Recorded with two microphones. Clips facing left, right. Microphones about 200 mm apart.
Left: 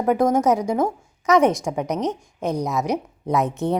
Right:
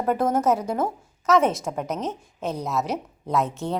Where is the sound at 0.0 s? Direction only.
15° left (ahead or behind).